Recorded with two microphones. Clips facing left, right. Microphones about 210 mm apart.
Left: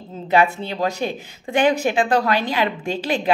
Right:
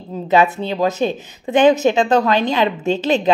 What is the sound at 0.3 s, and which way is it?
A woman's voice, 20° right (ahead or behind).